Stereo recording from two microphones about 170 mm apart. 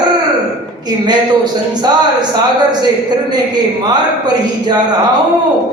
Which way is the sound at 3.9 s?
25° right (ahead or behind).